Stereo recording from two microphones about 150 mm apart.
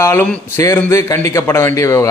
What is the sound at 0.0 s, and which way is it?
A man's voice, 15° left (ahead or behind).